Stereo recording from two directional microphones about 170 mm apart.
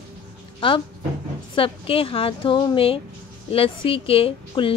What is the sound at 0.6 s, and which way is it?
A woman's voice, 30° left (ahead or behind).